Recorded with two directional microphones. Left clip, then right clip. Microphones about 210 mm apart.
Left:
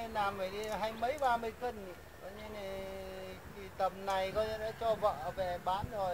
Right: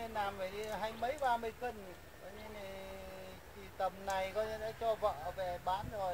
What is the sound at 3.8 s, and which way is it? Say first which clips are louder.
Speech: left 3 dB; 30° left (ahead or behind).